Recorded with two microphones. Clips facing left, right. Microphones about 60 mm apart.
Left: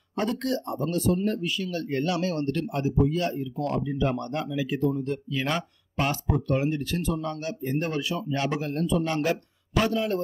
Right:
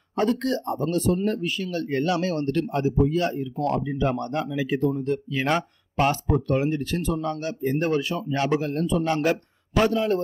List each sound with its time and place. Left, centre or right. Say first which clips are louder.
0.1 s speech: right 4 dB; right